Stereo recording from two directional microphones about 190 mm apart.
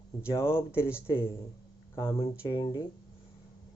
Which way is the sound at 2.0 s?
20° left (ahead or behind).